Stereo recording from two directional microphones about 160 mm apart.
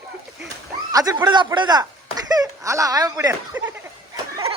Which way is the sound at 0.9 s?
20° right (ahead or behind).